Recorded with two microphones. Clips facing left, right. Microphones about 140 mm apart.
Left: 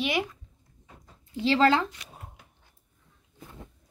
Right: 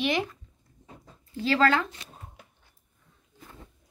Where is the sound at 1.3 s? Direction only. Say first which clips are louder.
Left 1 dB; 25° left (ahead or behind).